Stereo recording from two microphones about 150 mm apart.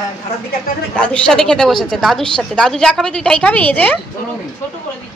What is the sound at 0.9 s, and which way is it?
A woman's voice, 5° left (ahead or behind).